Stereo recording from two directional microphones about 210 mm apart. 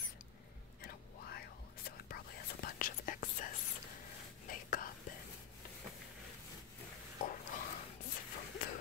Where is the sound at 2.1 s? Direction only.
45° left (ahead or behind).